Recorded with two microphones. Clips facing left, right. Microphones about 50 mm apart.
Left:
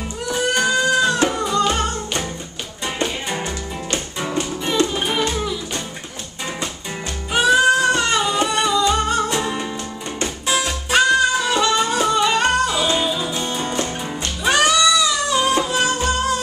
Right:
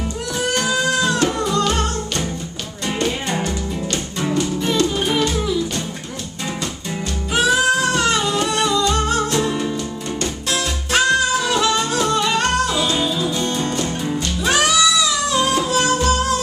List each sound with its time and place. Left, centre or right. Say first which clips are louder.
0.3 s music: left 3 dB; centre
3.4 s music: right 3 dB; centre
7.3 s music: left 2 dB; centre
10.9 s music: left 1 dB; centre